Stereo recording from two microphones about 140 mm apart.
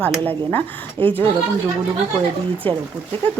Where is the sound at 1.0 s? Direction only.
40° right (ahead or behind).